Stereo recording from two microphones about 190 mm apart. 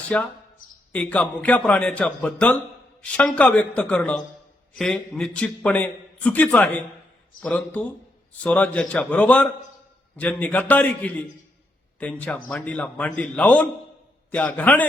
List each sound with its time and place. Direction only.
0.1 s a man's voice: 5° left (ahead or behind)
0.6 s a sound: 45° left (ahead or behind)
0.9 s a man's voice: 5° left (ahead or behind)